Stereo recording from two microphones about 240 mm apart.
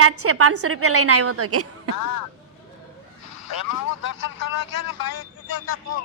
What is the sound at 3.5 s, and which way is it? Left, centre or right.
Speech, left.